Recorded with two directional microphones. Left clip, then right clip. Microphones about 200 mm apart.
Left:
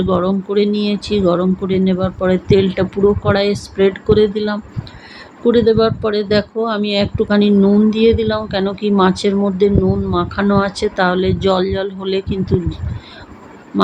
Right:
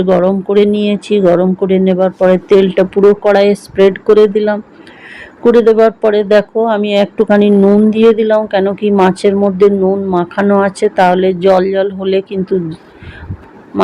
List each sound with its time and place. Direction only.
0.0 s speech: 5° right (ahead or behind)
13.7 s speech: centre (ahead or behind)